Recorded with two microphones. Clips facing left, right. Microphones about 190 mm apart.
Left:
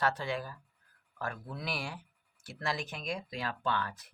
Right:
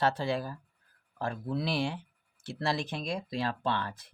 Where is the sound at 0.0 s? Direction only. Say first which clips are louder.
Right 4 dB; 30° right (ahead or behind).